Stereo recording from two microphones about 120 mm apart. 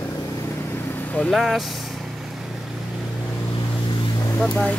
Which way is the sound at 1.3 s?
Centre (ahead or behind).